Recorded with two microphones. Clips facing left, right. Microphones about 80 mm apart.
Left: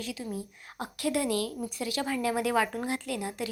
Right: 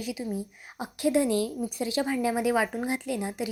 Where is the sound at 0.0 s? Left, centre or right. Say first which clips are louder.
Right 4 dB; centre.